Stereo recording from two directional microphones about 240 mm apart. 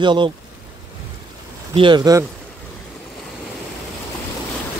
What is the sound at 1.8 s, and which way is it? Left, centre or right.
Speech, centre.